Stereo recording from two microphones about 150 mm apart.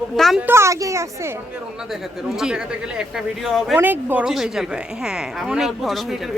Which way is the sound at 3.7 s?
10° right (ahead or behind).